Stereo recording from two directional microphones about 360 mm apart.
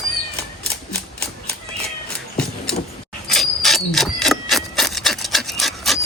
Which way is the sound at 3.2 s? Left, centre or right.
Centre.